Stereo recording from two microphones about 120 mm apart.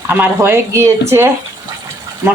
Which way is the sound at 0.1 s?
15° right (ahead or behind).